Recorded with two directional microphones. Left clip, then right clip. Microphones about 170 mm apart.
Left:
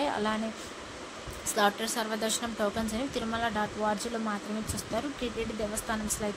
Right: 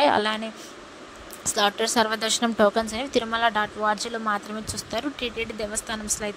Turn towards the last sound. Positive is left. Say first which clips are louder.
# right 3 dB
turn(degrees=-50)  # may be behind; listen again after turning